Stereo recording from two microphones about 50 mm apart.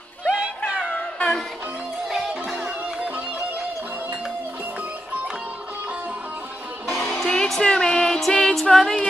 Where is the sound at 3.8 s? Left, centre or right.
Right.